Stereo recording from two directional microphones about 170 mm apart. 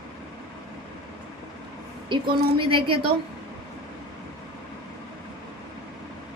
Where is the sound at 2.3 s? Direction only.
30° right (ahead or behind).